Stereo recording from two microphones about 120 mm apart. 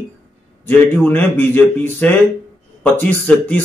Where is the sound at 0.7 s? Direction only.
15° left (ahead or behind).